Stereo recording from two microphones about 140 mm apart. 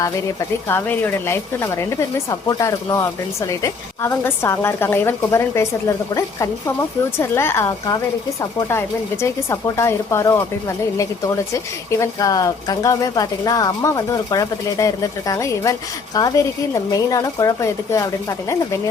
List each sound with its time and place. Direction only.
0.7 s a woman's voice: 15° left (ahead or behind)
11.5 s a woman's voice: 20° left (ahead or behind)